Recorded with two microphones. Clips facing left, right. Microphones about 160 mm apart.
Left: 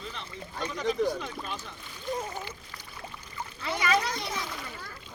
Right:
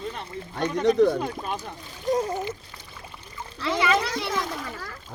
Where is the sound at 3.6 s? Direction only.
90° right.